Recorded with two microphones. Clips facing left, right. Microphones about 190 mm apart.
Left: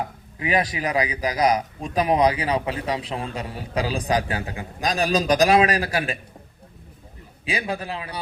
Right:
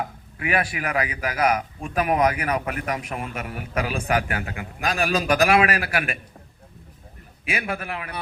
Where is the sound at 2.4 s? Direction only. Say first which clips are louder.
Left 2 dB; 25° left (ahead or behind).